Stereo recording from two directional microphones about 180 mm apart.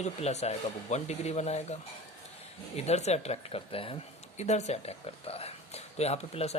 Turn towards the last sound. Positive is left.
turn(degrees=35)  # may be behind; listen again after turning